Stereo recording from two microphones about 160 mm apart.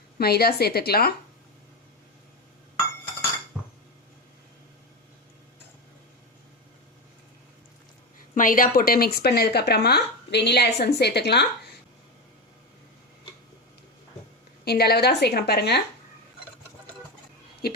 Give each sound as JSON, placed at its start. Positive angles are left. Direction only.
{"t": 0.2, "sound": "a woman's voice", "side_deg": 75}
{"t": 8.4, "sound": "speech", "side_deg": 55}
{"t": 14.6, "sound": "a woman's voice", "side_deg": 80}